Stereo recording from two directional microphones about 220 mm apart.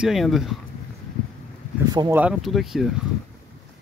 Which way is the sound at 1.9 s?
20° right (ahead or behind).